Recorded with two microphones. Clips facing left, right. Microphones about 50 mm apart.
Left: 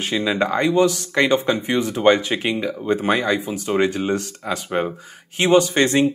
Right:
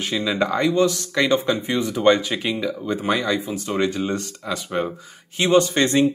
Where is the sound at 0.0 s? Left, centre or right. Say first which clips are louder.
Left 2 dB; left.